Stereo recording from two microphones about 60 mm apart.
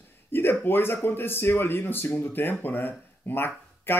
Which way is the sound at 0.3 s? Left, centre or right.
Left.